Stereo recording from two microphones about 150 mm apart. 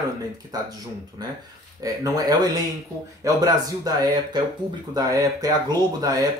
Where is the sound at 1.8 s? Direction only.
25° right (ahead or behind).